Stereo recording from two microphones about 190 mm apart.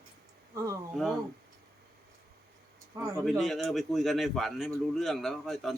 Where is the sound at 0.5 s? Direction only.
15° right (ahead or behind).